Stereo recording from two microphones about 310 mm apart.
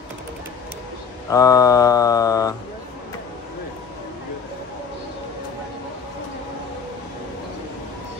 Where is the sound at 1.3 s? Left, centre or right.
Centre.